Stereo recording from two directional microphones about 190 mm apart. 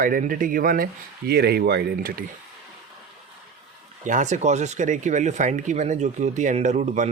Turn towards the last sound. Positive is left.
turn(degrees=-40)  # may be behind; listen again after turning